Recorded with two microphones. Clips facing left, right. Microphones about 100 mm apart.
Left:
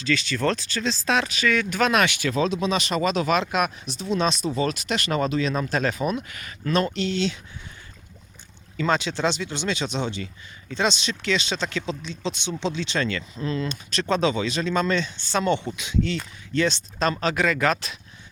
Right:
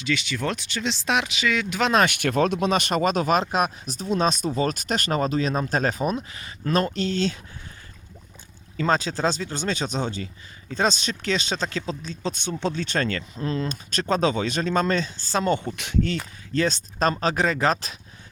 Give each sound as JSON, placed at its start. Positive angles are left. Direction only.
{"t": 0.0, "sound": "speech", "side_deg": -15}
{"t": 2.0, "sound": "speech", "side_deg": -55}
{"t": 8.8, "sound": "speech", "side_deg": -40}
{"t": 15.7, "sound": "speech", "side_deg": -60}
{"t": 16.6, "sound": "speech", "side_deg": -40}